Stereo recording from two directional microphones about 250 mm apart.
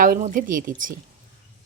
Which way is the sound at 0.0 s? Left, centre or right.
Right.